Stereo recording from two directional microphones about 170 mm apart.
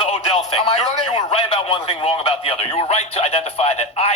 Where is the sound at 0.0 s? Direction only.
35° left (ahead or behind).